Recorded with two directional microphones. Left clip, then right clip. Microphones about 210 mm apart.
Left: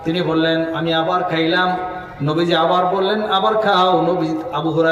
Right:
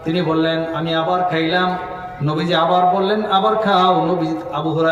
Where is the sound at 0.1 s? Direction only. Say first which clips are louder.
Even; 50° left (ahead or behind).